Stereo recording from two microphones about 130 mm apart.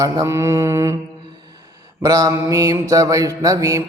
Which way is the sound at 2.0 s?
25° right (ahead or behind).